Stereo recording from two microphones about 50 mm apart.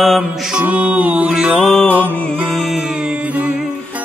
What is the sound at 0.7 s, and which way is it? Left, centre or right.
Music, right.